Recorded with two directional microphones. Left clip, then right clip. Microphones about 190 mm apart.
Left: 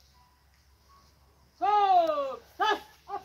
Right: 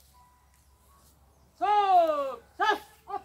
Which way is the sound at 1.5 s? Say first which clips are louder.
Right 1 dB; 5° right (ahead or behind).